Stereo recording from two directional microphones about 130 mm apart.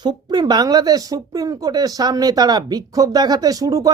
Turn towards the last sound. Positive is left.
turn(degrees=-30)  # may be behind; listen again after turning